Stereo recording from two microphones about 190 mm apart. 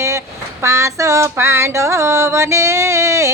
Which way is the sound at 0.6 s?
15° right (ahead or behind).